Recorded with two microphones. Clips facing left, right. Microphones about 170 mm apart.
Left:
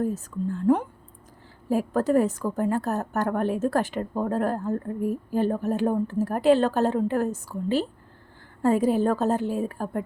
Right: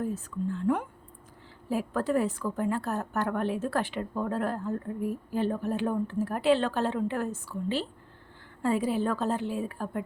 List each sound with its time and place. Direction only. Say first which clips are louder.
0.0 s a woman's voice: left 4 dB; 40° left (ahead or behind)